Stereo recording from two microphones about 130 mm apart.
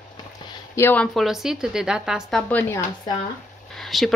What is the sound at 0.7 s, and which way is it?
Speech, 15° left (ahead or behind).